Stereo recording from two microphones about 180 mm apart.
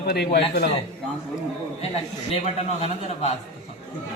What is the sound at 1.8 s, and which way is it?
A man's voice, 35° left (ahead or behind).